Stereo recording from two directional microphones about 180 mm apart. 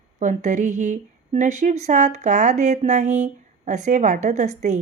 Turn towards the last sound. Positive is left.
turn(degrees=-40)  # may be behind; listen again after turning